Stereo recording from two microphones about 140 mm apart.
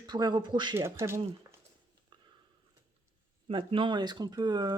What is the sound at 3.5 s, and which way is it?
Speech, 35° right (ahead or behind).